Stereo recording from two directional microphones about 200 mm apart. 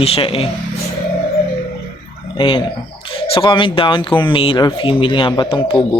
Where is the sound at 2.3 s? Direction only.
25° left (ahead or behind).